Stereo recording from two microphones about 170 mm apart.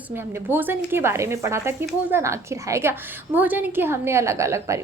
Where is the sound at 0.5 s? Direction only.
10° right (ahead or behind).